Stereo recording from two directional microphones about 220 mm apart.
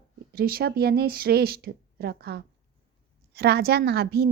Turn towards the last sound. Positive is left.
turn(degrees=-45)  # may be behind; listen again after turning